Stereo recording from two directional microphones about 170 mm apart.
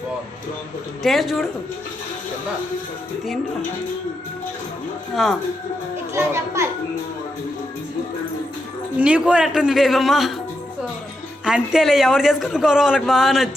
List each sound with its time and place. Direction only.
1.0 s a man's voice: centre (ahead or behind)
5.2 s a man's voice: centre (ahead or behind)
6.1 s a child's voice: 15° right (ahead or behind)
9.0 s a man's voice: 5° right (ahead or behind)
11.4 s a man's voice: 5° right (ahead or behind)